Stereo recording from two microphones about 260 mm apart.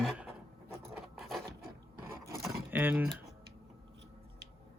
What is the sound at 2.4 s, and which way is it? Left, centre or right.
Typing, centre.